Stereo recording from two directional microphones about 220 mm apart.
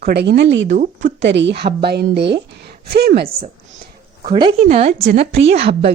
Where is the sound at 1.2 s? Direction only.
55° right (ahead or behind).